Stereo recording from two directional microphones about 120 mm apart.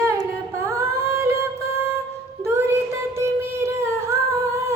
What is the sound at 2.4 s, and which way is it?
Child singing, 20° right (ahead or behind).